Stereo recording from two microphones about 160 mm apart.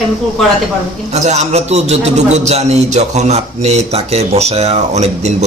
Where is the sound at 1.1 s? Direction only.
45° right (ahead or behind).